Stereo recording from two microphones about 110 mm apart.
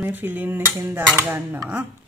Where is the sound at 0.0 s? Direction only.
15° right (ahead or behind).